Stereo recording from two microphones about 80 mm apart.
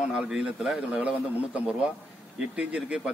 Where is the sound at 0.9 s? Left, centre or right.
Centre.